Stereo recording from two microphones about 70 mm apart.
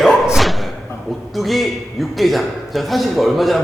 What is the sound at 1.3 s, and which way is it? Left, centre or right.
A man's voice, centre.